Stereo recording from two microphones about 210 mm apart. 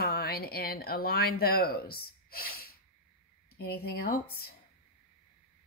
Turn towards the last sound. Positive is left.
turn(degrees=45)  # may be behind; listen again after turning